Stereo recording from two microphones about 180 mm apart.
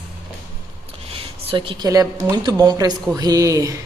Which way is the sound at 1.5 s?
30° right (ahead or behind).